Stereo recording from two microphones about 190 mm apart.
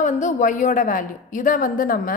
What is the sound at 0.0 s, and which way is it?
A woman's voice, 40° left (ahead or behind).